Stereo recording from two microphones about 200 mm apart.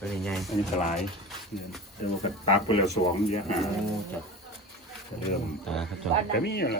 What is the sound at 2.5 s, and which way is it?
Speech, 30° left (ahead or behind).